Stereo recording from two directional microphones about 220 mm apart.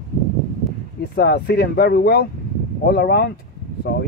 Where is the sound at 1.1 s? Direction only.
50° left (ahead or behind).